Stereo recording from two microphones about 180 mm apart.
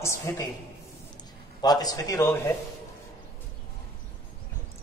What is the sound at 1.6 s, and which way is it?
Speech, 20° left (ahead or behind).